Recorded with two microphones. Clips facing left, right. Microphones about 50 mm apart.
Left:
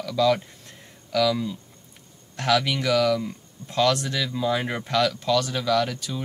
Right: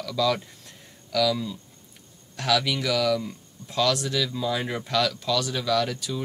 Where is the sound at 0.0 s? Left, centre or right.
Centre.